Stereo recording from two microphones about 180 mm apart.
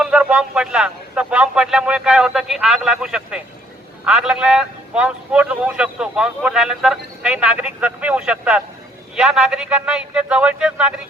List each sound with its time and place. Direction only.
0.0 s a man's voice: 5° right (ahead or behind)